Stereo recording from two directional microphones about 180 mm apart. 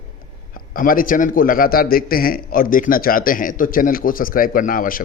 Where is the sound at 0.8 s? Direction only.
50° left (ahead or behind).